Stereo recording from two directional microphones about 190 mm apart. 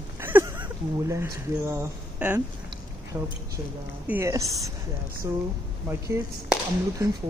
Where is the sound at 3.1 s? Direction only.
20° right (ahead or behind).